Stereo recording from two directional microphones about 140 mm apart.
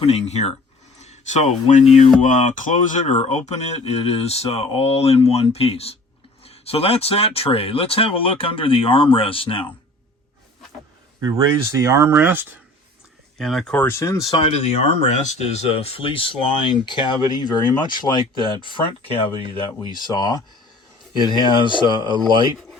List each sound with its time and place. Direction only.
0.0 s speech: 50° left (ahead or behind)
0.9 s a sound: 55° left (ahead or behind)
2.2 s speech: 65° left (ahead or behind)
3.2 s speech: 55° left (ahead or behind)
11.8 s speech: 20° right (ahead or behind)
13.4 s speech: centre (ahead or behind)
13.7 s speech: 20° left (ahead or behind)
14.3 s speech: 45° left (ahead or behind); by 21.4 s 30° left (ahead or behind)
21.8 s speech: 30° right (ahead or behind)